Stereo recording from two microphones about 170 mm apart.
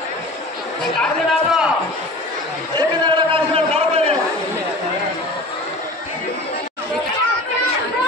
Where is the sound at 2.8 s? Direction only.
30° right (ahead or behind).